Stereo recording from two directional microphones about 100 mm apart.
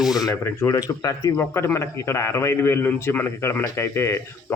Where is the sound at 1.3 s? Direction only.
25° left (ahead or behind).